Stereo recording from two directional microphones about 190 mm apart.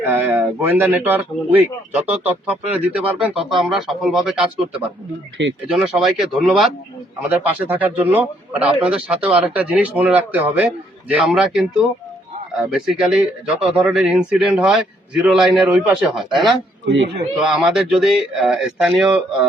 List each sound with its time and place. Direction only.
0.0 s speech: 10° right (ahead or behind)
5.7 s a man's voice: centre (ahead or behind)
12.7 s speech: 5° right (ahead or behind)
16.8 s speech: 65° right (ahead or behind)
17.3 s speech: centre (ahead or behind)